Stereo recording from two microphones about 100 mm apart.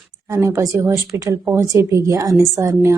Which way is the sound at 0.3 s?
30° right (ahead or behind).